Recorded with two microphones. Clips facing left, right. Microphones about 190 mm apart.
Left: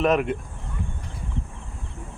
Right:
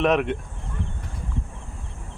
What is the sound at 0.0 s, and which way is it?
Speech, centre (ahead or behind).